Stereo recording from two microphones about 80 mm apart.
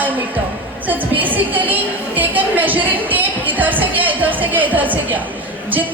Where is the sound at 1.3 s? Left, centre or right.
Right.